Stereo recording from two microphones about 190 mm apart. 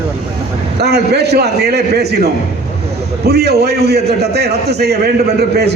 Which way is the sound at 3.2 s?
60° right (ahead or behind).